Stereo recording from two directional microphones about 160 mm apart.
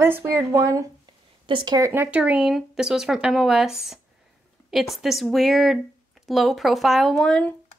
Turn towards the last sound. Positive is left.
turn(degrees=5)  # may be behind; listen again after turning